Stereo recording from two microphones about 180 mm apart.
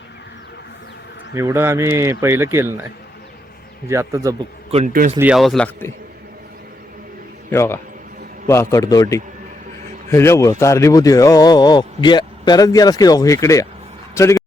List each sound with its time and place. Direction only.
1.3 s speech: 15° right (ahead or behind)
3.8 s speech: 15° right (ahead or behind)
4.9 s speech: 55° right (ahead or behind)
5.1 s a man's voice: 5° right (ahead or behind)
7.5 s a man's voice: 15° left (ahead or behind)